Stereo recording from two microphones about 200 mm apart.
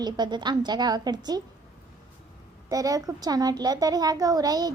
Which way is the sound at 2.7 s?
15° right (ahead or behind).